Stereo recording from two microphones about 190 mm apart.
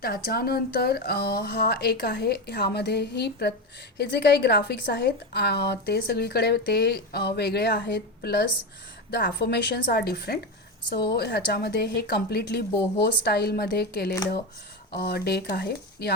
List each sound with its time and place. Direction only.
0.0 s a woman's voice: 55° left (ahead or behind)